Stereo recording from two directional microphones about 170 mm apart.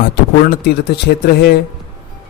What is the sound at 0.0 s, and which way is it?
Speech, 65° left (ahead or behind).